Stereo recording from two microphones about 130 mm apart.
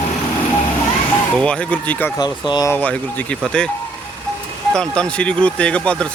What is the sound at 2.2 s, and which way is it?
Speech, 35° left (ahead or behind).